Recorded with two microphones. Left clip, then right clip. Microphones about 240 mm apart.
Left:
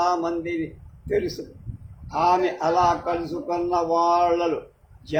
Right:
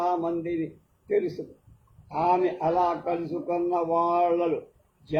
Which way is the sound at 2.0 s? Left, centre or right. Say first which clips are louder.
Left 3 dB; left.